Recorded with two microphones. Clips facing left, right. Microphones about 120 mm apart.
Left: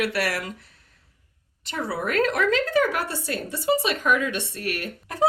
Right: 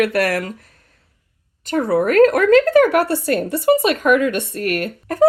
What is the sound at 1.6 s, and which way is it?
Speech, 50° right (ahead or behind).